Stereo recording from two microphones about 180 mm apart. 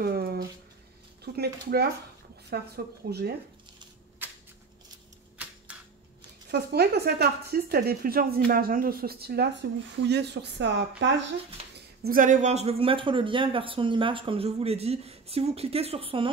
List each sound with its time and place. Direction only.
0.0 s speech: 60° right (ahead or behind)
4.2 s crushing: 10° right (ahead or behind)
5.7 s a sound: 10° right (ahead or behind)
6.5 s speech: 65° right (ahead or behind); by 11.2 s 80° right
11.6 s a sound: 35° right (ahead or behind)
12.0 s speech: 50° right (ahead or behind); by 16.3 s 30° right (ahead or behind)